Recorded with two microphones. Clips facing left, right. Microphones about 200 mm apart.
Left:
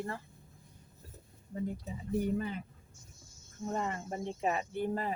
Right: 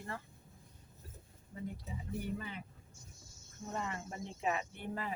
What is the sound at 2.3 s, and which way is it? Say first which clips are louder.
Speech: left 9 dB; 45° left (ahead or behind).